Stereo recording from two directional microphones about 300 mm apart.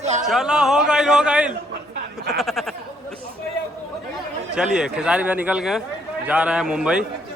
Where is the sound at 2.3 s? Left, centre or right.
Centre.